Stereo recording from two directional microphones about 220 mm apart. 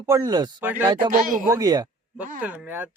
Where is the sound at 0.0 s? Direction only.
15° right (ahead or behind).